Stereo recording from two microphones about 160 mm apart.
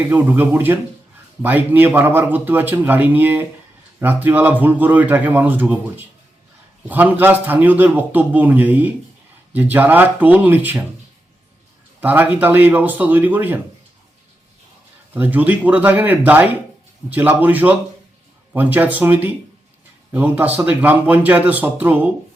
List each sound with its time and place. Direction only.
0.0 s speech: 10° right (ahead or behind)
11.9 s speech: 10° right (ahead or behind)
15.1 s speech: 10° right (ahead or behind)